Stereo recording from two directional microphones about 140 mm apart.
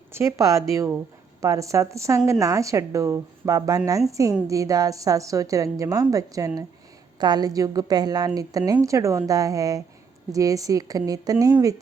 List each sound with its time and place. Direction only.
0.1 s a woman's voice: 20° right (ahead or behind)